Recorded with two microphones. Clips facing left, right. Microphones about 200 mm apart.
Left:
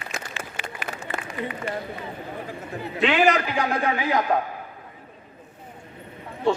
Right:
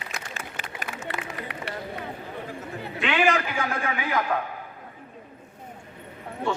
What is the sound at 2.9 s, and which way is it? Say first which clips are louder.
A man's voice: left 4 dB; 40° left (ahead or behind).